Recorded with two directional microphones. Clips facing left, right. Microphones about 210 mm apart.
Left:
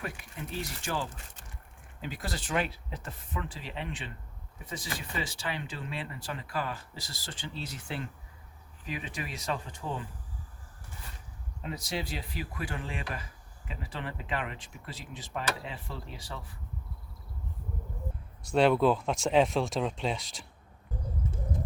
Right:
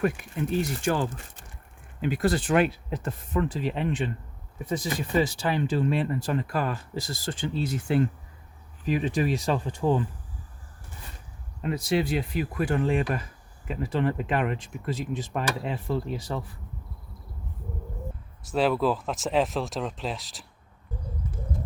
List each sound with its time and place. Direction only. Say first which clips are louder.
0.0 s speech: right 13 dB; 50° right (ahead or behind)
8.9 s speech: right 13 dB; 35° right (ahead or behind)
11.6 s speech: right 10 dB; 55° right (ahead or behind)
18.5 s speech: even; centre (ahead or behind)
21.2 s bird: even; 25° left (ahead or behind)